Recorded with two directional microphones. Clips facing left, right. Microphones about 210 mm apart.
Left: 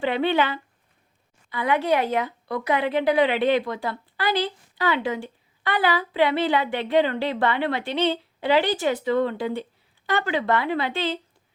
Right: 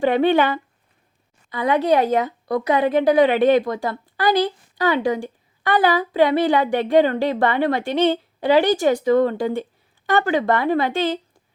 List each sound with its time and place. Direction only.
0.0 s a woman's voice: 45° right (ahead or behind)